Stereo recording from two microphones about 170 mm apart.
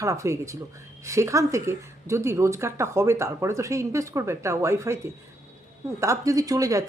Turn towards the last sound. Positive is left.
turn(degrees=-20)  # may be behind; listen again after turning